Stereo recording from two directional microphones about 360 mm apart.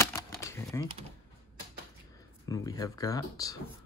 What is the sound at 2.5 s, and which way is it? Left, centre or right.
Speech, centre.